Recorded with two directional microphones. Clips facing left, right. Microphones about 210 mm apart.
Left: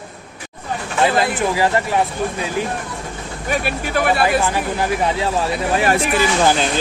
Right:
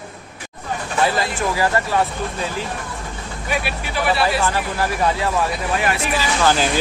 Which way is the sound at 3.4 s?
45° left (ahead or behind).